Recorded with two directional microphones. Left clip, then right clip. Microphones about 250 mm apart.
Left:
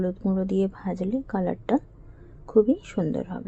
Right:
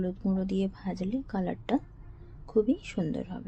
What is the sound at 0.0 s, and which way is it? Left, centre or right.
Speech, centre.